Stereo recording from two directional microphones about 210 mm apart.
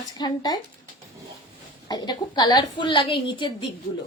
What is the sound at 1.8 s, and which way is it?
A woman's voice, 20° left (ahead or behind).